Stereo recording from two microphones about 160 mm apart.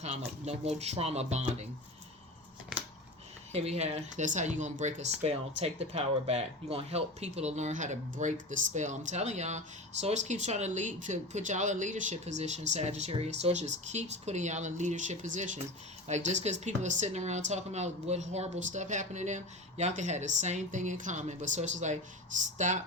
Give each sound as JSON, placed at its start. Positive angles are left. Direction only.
{"t": 0.4, "sound": "speech", "side_deg": -40}
{"t": 2.7, "sound": "a sound", "side_deg": -5}
{"t": 3.5, "sound": "speech", "side_deg": -40}